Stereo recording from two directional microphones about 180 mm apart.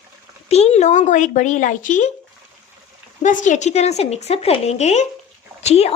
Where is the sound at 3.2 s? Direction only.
45° left (ahead or behind).